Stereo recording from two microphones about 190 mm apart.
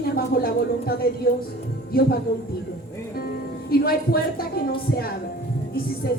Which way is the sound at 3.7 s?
55° left (ahead or behind).